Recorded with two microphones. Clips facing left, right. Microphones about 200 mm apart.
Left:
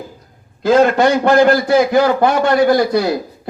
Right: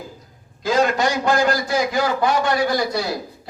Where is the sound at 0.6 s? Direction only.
60° left (ahead or behind).